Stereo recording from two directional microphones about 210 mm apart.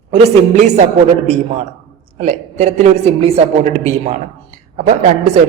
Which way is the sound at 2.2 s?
35° right (ahead or behind).